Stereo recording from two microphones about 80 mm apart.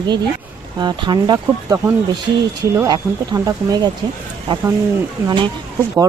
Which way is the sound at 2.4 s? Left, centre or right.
Right.